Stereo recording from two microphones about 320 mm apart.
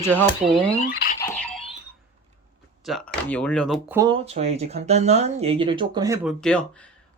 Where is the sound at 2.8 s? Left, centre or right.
Centre.